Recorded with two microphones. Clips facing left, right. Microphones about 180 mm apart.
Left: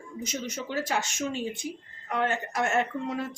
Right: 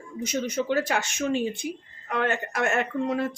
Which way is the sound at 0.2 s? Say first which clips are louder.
Right 7 dB; 60° right (ahead or behind).